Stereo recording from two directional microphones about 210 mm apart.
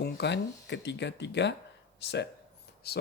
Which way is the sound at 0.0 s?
55° left (ahead or behind).